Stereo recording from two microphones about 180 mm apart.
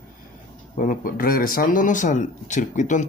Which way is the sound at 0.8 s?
50° left (ahead or behind).